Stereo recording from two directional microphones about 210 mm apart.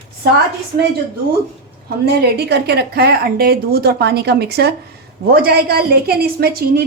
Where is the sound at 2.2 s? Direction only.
50° right (ahead or behind).